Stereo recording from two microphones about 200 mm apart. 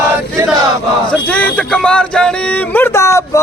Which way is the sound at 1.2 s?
5° left (ahead or behind).